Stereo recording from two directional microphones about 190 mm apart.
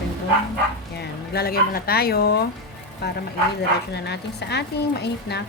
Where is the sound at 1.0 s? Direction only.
55° left (ahead or behind).